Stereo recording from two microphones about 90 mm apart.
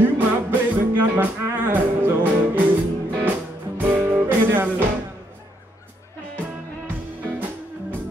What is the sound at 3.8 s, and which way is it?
Music, 20° right (ahead or behind).